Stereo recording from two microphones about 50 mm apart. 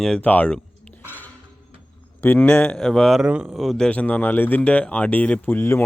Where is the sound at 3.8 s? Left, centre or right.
Left.